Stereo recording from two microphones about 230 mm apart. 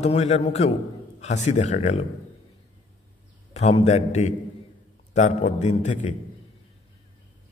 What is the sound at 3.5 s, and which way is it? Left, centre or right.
A man's voice, left.